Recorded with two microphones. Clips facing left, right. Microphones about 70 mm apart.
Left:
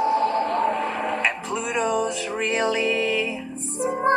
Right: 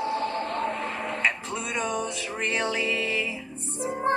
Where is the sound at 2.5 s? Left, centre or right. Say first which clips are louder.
Left 5 dB; centre.